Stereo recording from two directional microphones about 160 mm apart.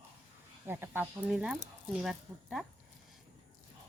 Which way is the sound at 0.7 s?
15° right (ahead or behind).